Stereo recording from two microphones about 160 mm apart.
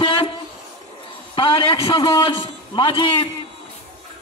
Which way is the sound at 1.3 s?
30° left (ahead or behind).